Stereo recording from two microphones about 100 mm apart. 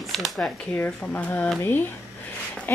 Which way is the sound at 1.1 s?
15° left (ahead or behind).